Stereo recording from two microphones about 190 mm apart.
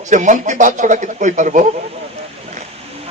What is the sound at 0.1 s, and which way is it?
A man's voice, 40° right (ahead or behind).